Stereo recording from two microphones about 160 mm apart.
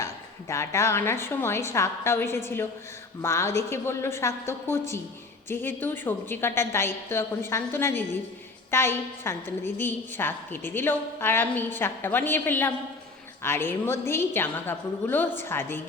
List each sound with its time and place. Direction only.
0.0 s a woman's voice: 20° left (ahead or behind)